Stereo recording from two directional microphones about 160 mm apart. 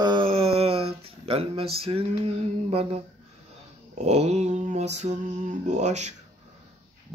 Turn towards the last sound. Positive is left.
turn(degrees=-45)  # may be behind; listen again after turning